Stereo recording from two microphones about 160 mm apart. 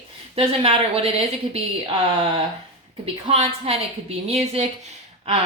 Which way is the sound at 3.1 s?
40° right (ahead or behind).